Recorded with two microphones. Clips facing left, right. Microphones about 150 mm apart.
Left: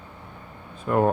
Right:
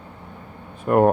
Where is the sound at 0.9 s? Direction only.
55° right (ahead or behind).